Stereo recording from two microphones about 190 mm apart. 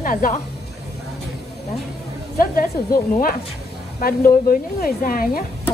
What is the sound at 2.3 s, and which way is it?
A woman's voice, 50° left (ahead or behind).